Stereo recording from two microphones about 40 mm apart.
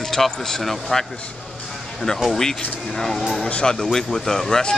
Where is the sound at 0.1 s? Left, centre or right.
Centre.